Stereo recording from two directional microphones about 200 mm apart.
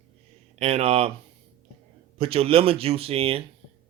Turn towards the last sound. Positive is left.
turn(degrees=-30)  # may be behind; listen again after turning